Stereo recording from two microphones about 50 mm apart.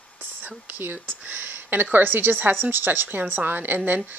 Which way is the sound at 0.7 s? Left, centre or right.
Right.